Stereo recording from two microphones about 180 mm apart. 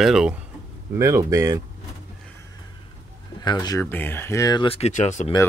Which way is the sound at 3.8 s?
10° left (ahead or behind).